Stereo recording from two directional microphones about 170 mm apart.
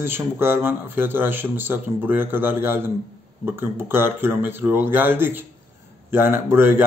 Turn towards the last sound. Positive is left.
turn(degrees=-15)  # may be behind; listen again after turning